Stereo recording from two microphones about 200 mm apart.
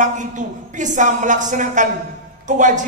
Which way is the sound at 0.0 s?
40° right (ahead or behind).